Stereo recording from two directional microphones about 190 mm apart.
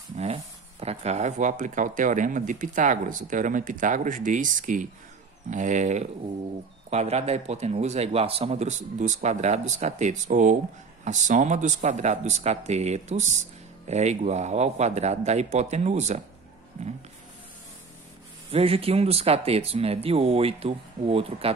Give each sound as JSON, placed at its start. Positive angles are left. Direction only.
{"t": 0.2, "sound": "speech", "side_deg": -35}
{"t": 18.5, "sound": "speech", "side_deg": -30}